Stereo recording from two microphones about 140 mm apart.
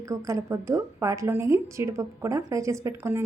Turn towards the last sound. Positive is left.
turn(degrees=-20)  # may be behind; listen again after turning